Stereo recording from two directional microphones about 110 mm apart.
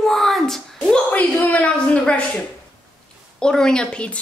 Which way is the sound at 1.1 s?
15° left (ahead or behind).